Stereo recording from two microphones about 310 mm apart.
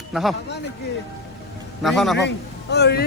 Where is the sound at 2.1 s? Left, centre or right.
Left.